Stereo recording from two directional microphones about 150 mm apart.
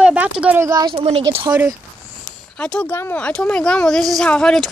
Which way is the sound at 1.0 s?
40° right (ahead or behind).